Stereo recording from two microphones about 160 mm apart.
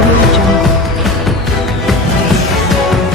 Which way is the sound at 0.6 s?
Centre (ahead or behind).